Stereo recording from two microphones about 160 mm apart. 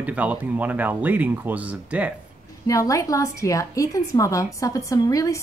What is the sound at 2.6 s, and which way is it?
A woman's voice, 20° left (ahead or behind).